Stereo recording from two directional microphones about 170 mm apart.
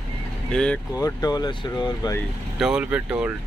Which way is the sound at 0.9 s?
20° left (ahead or behind).